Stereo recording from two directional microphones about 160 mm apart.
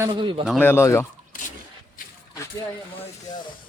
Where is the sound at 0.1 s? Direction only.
30° right (ahead or behind).